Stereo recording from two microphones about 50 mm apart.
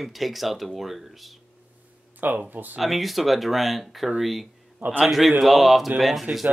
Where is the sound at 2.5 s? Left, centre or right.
Right.